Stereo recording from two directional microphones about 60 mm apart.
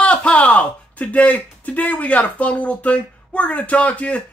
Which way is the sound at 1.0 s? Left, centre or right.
Left.